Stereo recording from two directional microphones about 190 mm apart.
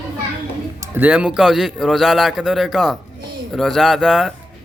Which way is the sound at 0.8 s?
10° right (ahead or behind).